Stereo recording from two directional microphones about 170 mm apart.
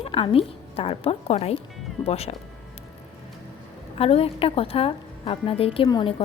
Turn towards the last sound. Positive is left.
turn(degrees=25)  # may be behind; listen again after turning